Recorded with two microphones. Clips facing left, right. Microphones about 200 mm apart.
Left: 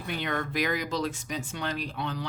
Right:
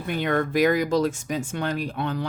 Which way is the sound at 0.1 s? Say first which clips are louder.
Right 8 dB; 50° right (ahead or behind).